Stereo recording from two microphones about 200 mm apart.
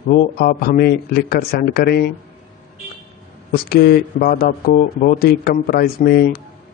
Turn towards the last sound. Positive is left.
turn(degrees=50)  # may be behind; listen again after turning